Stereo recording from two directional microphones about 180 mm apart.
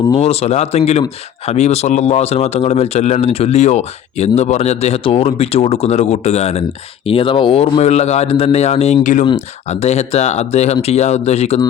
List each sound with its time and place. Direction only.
0.1 s a man's voice: 35° left (ahead or behind)